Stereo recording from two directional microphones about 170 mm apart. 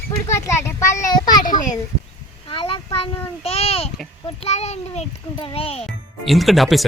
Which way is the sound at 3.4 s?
35° left (ahead or behind).